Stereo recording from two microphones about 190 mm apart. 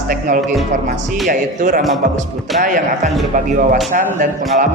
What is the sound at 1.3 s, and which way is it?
Speech, 45° right (ahead or behind).